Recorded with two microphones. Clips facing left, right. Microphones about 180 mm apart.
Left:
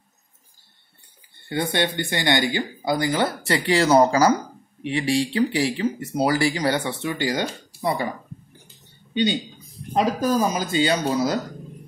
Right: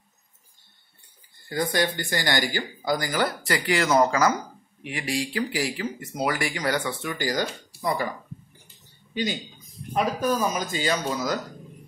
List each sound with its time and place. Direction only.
1.5 s speech: 25° left (ahead or behind)
9.1 s speech: 30° left (ahead or behind)